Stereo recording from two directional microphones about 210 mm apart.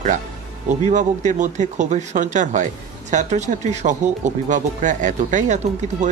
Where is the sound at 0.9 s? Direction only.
35° right (ahead or behind).